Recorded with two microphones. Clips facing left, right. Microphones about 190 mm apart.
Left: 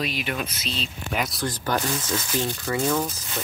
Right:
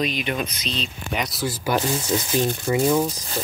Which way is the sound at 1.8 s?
20° right (ahead or behind).